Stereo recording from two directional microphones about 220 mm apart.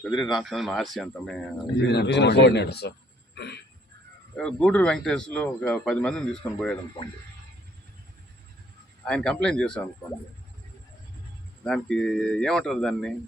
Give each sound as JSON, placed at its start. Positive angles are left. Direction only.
{"t": 0.0, "sound": "a man's voice", "side_deg": 0}
{"t": 1.9, "sound": "speech", "side_deg": 50}
{"t": 3.3, "sound": "throat clearing", "side_deg": 50}
{"t": 4.4, "sound": "a man's voice", "side_deg": 5}
{"t": 9.0, "sound": "a man's voice", "side_deg": 5}
{"t": 11.6, "sound": "a man's voice", "side_deg": 0}